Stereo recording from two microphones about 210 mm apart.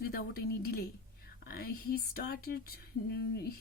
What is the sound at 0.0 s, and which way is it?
A woman's voice, 45° left (ahead or behind).